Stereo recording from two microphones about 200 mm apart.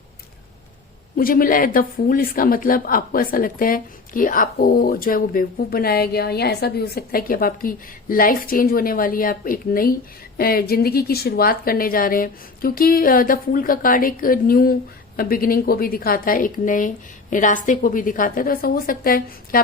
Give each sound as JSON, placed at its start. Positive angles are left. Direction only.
{"t": 1.1, "sound": "speech", "side_deg": 45}